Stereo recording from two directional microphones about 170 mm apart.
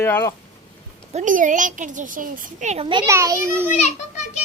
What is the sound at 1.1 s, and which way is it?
A child's voice, 50° right (ahead or behind).